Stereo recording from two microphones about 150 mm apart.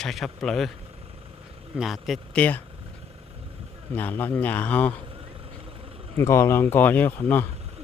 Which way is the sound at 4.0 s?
15° left (ahead or behind).